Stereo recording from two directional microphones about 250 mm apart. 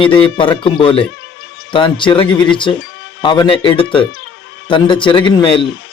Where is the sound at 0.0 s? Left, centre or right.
Centre.